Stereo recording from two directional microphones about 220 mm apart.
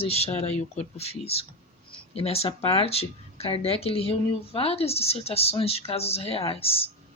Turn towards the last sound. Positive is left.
turn(degrees=25)  # may be behind; listen again after turning